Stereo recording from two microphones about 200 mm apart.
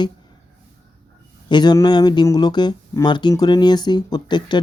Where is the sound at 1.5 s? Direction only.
20° left (ahead or behind).